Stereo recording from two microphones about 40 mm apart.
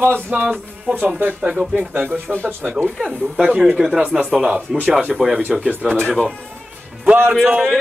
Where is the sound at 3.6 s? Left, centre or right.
Centre.